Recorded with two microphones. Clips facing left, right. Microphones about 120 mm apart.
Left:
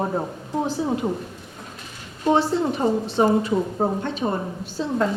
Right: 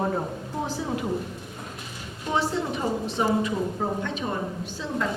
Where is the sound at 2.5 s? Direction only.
35° left (ahead or behind).